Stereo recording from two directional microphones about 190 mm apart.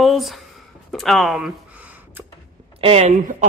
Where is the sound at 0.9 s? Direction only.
Centre (ahead or behind).